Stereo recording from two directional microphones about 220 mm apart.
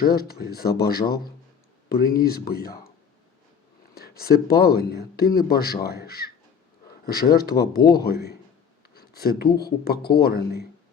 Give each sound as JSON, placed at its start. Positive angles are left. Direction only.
{"t": 0.0, "sound": "speech", "side_deg": 45}
{"t": 3.9, "sound": "speech", "side_deg": 45}